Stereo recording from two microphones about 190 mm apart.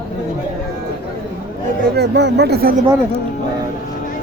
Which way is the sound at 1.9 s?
60° right (ahead or behind).